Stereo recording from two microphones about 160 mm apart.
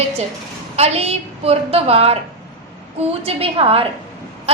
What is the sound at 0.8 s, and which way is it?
A woman's voice, 40° right (ahead or behind).